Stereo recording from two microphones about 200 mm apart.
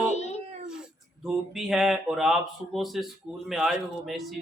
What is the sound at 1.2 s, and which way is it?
Speech, centre (ahead or behind).